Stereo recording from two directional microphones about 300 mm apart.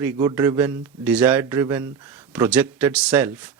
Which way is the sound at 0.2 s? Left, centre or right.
Centre.